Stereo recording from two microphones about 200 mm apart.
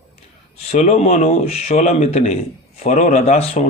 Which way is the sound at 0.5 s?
30° left (ahead or behind).